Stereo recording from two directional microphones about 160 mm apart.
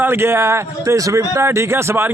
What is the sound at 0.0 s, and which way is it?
Speech, 15° right (ahead or behind).